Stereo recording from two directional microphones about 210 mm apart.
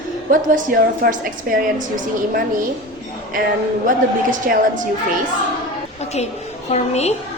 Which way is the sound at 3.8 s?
40° right (ahead or behind).